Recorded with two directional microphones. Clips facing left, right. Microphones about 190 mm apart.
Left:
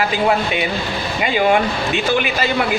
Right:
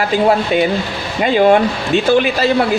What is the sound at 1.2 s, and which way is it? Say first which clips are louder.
Speech: right 5 dB; 40° right (ahead or behind).